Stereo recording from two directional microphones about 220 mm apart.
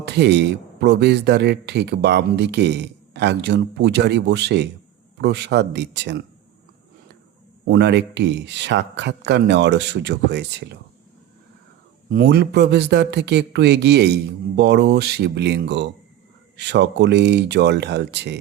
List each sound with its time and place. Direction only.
0.0 s a man's voice: 50° right (ahead or behind)
7.6 s a man's voice: 50° right (ahead or behind)
12.1 s a man's voice: 50° right (ahead or behind)